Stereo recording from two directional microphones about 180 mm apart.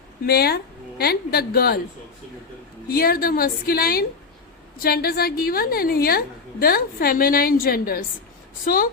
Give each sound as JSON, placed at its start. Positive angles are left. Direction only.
{"t": 0.3, "sound": "a woman's voice", "side_deg": 60}
{"t": 2.9, "sound": "a woman's voice", "side_deg": 55}